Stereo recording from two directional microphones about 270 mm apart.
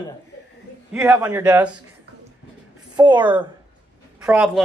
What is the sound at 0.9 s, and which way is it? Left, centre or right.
Speech, centre.